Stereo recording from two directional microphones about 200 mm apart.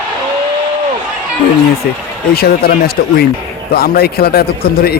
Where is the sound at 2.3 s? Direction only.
50° left (ahead or behind).